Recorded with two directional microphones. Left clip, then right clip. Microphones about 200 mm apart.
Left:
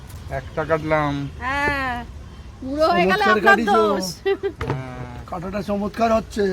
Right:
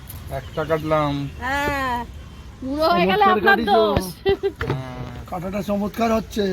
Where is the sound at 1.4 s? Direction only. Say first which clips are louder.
Left 1 dB; 50° right (ahead or behind).